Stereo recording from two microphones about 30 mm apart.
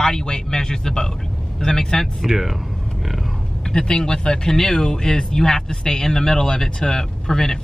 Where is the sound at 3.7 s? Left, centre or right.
Left.